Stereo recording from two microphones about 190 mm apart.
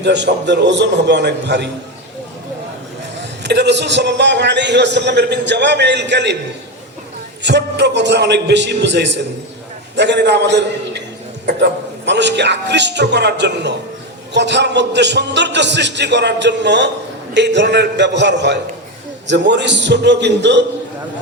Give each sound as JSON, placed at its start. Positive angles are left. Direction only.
{"t": 0.0, "sound": "a man's voice", "side_deg": -65}
{"t": 3.4, "sound": "a man's voice", "side_deg": -65}
{"t": 7.4, "sound": "a man's voice", "side_deg": -65}